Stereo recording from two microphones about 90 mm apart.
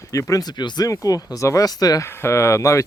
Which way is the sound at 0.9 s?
40° left (ahead or behind).